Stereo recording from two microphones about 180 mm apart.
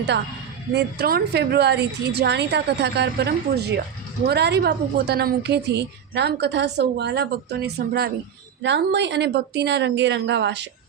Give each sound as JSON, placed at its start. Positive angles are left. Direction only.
{"t": 0.7, "sound": "a woman's voice", "side_deg": -65}
{"t": 8.6, "sound": "a woman's voice", "side_deg": -75}